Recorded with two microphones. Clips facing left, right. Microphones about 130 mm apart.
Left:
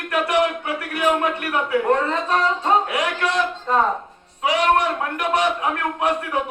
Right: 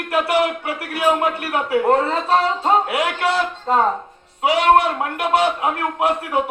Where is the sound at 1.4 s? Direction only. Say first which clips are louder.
Right 2 dB; 30° right (ahead or behind).